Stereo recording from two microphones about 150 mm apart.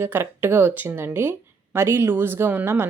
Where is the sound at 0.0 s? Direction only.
15° right (ahead or behind).